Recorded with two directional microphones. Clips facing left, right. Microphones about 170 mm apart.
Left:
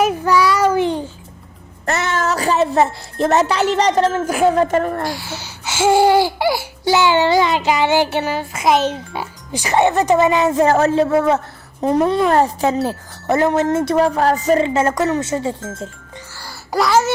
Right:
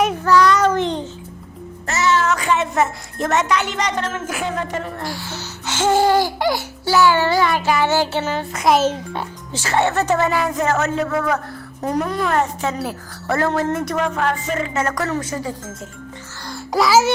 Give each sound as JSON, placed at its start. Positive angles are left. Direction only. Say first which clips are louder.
{"t": 0.0, "sound": "child singing", "louder": "even", "side_deg": 10}
{"t": 1.9, "sound": "music", "louder": "right 1 dB", "side_deg": 55}
{"t": 2.2, "sound": "speech", "louder": "left 3 dB", "side_deg": 35}
{"t": 5.1, "sound": "speech", "louder": "left 1 dB", "side_deg": 10}
{"t": 6.9, "sound": "child singing", "louder": "left 1 dB", "side_deg": 20}
{"t": 9.5, "sound": "a woman's voice", "louder": "left 4 dB", "side_deg": 15}
{"t": 16.4, "sound": "music", "louder": "even", "side_deg": 5}